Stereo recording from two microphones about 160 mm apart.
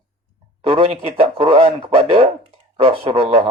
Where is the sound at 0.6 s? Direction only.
35° right (ahead or behind).